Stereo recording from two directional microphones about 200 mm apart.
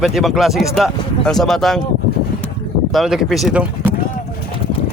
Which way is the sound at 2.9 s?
Centre (ahead or behind).